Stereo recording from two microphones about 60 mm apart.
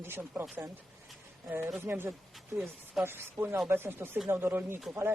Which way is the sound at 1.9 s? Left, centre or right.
Right.